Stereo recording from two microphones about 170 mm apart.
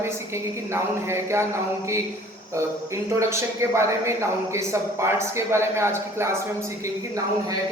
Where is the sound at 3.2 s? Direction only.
15° right (ahead or behind).